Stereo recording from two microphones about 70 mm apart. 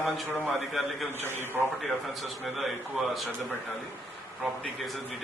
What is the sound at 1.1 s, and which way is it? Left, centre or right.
Speech, right.